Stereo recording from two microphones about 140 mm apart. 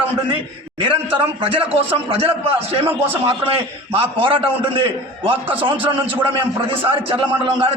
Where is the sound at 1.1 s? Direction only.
40° right (ahead or behind).